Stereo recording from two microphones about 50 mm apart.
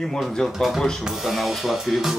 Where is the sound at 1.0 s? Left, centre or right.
Centre.